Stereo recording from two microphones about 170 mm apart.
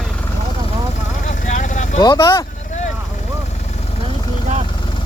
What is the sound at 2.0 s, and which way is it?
Speech, 25° left (ahead or behind).